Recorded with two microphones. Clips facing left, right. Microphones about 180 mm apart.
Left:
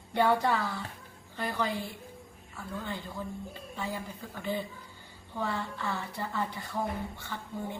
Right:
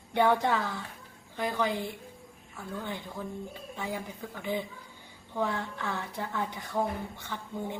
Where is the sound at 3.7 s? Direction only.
15° right (ahead or behind).